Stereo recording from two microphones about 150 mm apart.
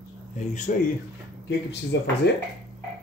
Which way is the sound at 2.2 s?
90° left.